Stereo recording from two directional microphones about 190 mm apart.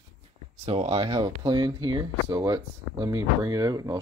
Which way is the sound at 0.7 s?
30° right (ahead or behind).